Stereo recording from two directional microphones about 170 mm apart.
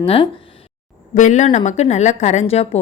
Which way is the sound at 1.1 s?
45° left (ahead or behind).